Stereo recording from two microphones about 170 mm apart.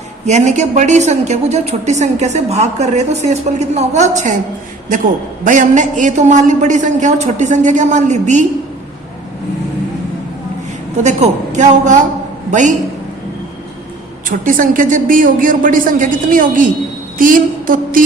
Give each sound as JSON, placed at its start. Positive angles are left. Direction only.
{"t": 0.3, "sound": "a woman's voice", "side_deg": -45}
{"t": 5.5, "sound": "a woman's voice", "side_deg": -50}
{"t": 10.9, "sound": "a woman's voice", "side_deg": -45}
{"t": 14.3, "sound": "a woman's voice", "side_deg": -50}